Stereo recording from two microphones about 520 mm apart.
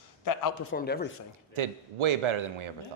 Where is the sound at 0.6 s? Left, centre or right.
Centre.